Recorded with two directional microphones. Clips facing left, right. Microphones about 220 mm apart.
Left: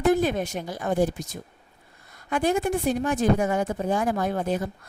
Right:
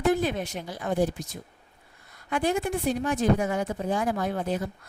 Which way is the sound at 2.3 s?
45° left (ahead or behind).